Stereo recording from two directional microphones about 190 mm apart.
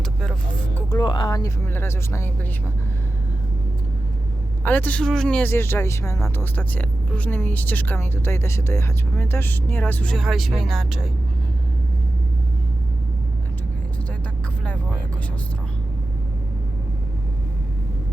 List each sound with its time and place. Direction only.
0.9 s speech: 20° left (ahead or behind)
4.6 s speech: 10° left (ahead or behind)